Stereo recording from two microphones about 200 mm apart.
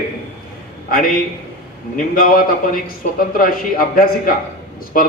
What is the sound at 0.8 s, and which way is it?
Speech, 45° left (ahead or behind).